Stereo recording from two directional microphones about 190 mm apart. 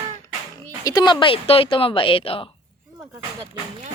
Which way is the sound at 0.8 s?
20° left (ahead or behind).